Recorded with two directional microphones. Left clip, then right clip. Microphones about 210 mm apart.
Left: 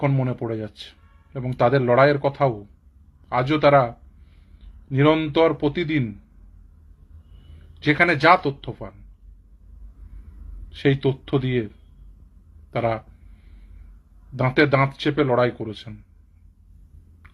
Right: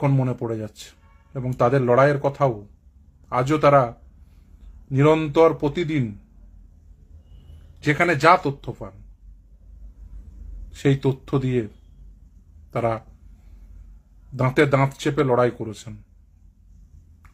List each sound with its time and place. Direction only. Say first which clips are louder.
0.0 s speech: even; 10° right (ahead or behind)
7.8 s speech: left 1 dB; 10° right (ahead or behind)
10.7 s speech: left 1 dB; 10° right (ahead or behind)
12.7 s speech: even; 10° right (ahead or behind)
14.3 s speech: left 1 dB; 10° right (ahead or behind)